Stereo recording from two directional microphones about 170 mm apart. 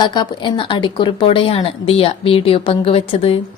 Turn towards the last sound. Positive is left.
turn(degrees=35)  # may be behind; listen again after turning